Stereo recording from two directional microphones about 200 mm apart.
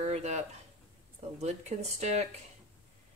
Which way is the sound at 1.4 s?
35° right (ahead or behind).